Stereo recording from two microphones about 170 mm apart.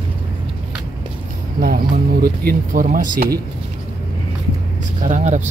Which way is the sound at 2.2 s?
60° right (ahead or behind).